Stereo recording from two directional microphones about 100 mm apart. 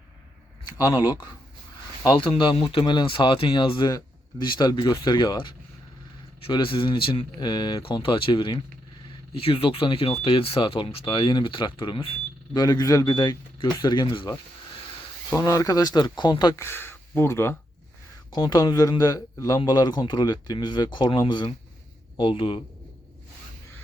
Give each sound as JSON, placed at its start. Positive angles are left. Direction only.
{"t": 0.6, "sound": "speech", "side_deg": 40}
{"t": 2.0, "sound": "speech", "side_deg": 60}
{"t": 12.5, "sound": "speech", "side_deg": 40}
{"t": 15.4, "sound": "speech", "side_deg": 35}
{"t": 16.6, "sound": "speech", "side_deg": 25}
{"t": 18.3, "sound": "speech", "side_deg": 45}